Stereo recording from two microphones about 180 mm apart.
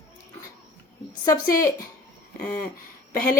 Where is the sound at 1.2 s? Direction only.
20° left (ahead or behind).